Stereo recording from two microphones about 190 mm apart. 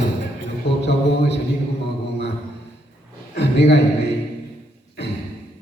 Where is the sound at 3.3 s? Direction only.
65° left (ahead or behind).